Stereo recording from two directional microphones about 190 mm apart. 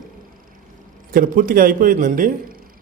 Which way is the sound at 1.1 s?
45° right (ahead or behind).